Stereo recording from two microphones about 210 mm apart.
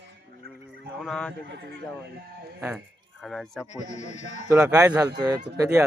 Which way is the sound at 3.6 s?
35° left (ahead or behind).